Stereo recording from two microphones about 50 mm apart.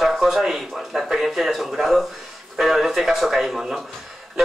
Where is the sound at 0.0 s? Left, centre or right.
Centre.